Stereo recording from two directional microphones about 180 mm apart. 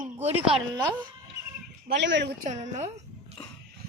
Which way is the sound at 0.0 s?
35° right (ahead or behind).